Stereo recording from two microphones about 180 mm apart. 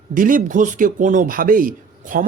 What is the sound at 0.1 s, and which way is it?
A man's voice, 50° right (ahead or behind).